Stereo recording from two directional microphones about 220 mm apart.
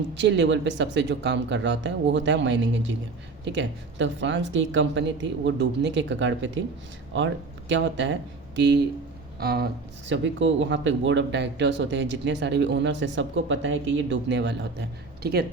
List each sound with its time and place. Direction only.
0.1 s speech: 55° right (ahead or behind)
7.7 s speech: 55° right (ahead or behind)
10.1 s speech: 55° right (ahead or behind)